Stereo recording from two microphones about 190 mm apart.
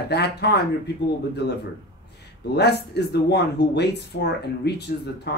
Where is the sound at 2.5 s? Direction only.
60° left (ahead or behind).